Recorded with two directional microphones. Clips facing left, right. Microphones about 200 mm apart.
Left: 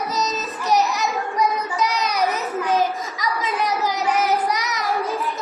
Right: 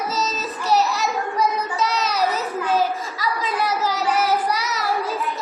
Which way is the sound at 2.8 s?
15° left (ahead or behind).